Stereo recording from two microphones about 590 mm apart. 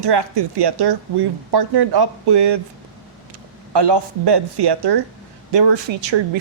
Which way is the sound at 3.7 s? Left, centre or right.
Right.